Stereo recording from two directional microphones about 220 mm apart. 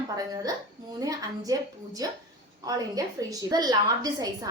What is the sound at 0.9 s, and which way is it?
A woman's voice, 15° right (ahead or behind).